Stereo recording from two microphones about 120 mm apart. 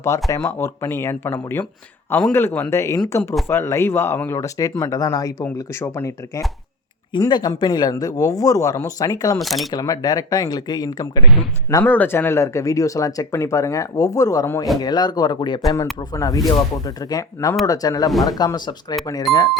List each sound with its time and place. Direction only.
0.3 s speech: 25° left (ahead or behind)
7.2 s speech: 35° left (ahead or behind)
9.4 s speech: centre (ahead or behind)
9.7 s speech: 30° left (ahead or behind)
11.8 s speech: 15° left (ahead or behind); by 15.6 s 40° left (ahead or behind)
16.1 s speech: 30° left (ahead or behind)
19.3 s speech: centre (ahead or behind)